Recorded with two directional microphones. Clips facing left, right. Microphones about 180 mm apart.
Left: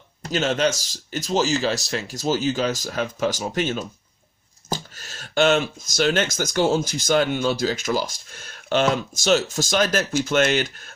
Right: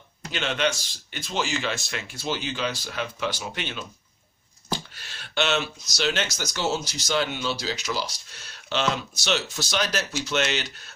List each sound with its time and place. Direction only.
0.2 s speech: 40° left (ahead or behind)